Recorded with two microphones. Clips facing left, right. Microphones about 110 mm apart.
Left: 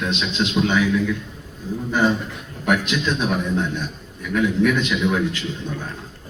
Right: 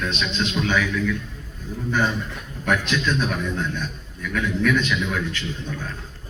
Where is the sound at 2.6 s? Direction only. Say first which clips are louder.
Left 2 dB; 15° left (ahead or behind).